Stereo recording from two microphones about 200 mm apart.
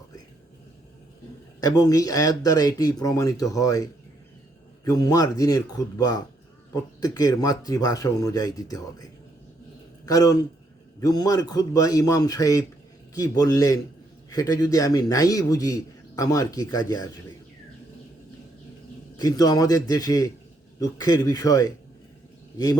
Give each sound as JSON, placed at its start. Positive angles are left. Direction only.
{"t": 1.6, "sound": "a man's voice", "side_deg": 20}
{"t": 4.9, "sound": "a man's voice", "side_deg": 20}
{"t": 10.1, "sound": "a man's voice", "side_deg": 20}
{"t": 19.1, "sound": "a man's voice", "side_deg": 20}